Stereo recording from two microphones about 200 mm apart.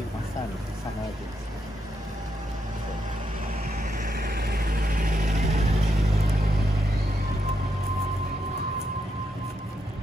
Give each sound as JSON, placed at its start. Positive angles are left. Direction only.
{"t": 3.7, "sound": "vehicle", "side_deg": -45}